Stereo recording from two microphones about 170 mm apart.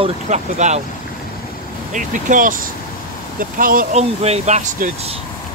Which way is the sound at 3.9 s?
35° right (ahead or behind).